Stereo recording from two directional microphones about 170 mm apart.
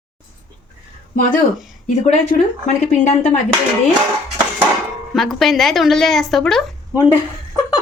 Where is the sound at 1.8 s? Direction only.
45° left (ahead or behind).